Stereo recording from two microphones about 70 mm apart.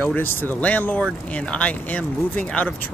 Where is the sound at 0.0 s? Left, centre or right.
Left.